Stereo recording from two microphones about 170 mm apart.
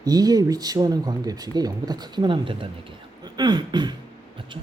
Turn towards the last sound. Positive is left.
turn(degrees=-25)  # may be behind; listen again after turning